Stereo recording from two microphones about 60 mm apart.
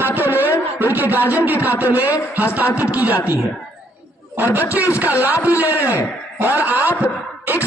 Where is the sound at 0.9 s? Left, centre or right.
Right.